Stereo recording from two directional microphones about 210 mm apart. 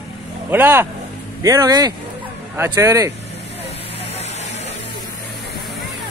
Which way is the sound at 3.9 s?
30° left (ahead or behind).